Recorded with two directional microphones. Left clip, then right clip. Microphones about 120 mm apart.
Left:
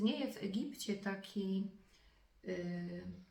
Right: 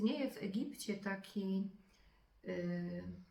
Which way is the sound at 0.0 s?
25° left (ahead or behind).